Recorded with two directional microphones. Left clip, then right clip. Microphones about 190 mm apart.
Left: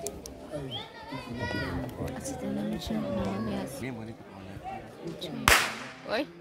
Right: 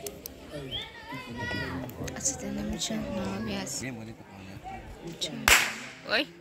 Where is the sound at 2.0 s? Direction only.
10° left (ahead or behind).